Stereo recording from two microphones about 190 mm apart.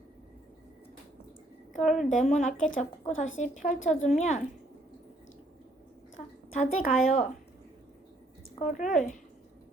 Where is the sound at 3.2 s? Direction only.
40° left (ahead or behind).